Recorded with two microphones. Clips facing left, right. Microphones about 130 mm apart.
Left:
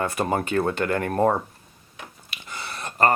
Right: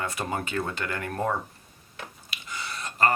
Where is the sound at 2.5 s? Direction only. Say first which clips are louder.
Left 3 dB; 55° left (ahead or behind).